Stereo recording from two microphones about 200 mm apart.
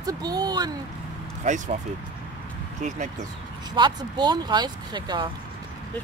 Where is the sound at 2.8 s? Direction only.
40° right (ahead or behind).